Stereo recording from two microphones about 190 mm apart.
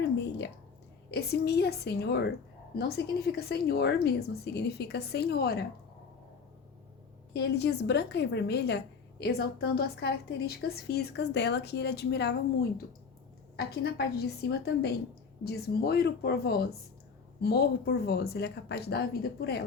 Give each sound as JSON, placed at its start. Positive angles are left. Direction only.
{"t": 1.1, "sound": "a woman's voice", "side_deg": 60}
{"t": 7.3, "sound": "a woman's voice", "side_deg": 60}